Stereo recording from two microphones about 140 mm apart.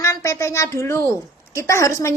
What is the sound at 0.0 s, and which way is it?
A woman's voice, 20° left (ahead or behind).